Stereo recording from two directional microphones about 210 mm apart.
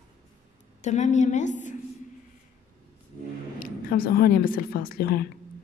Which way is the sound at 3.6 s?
45° left (ahead or behind).